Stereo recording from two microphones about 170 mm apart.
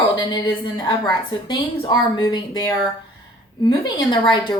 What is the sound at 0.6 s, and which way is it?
A woman's voice, 25° left (ahead or behind).